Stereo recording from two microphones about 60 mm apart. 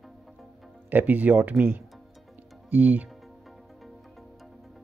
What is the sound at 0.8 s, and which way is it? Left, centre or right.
Speech, right.